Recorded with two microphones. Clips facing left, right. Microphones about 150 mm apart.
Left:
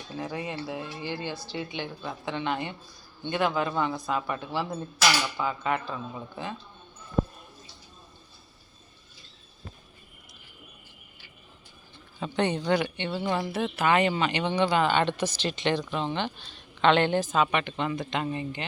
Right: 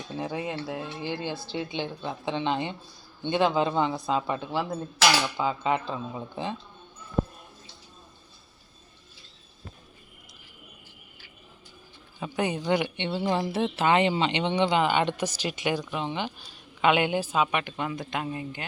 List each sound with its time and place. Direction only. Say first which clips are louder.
0.3 s speech: right 2 dB; 5° right (ahead or behind)
1.2 s speech: right 2 dB; 20° right (ahead or behind)
4.5 s speech: right 2 dB; centre (ahead or behind)
5.4 s speech: right 2 dB; 20° right (ahead or behind)
12.2 s speech: left 1 dB; 10° right (ahead or behind)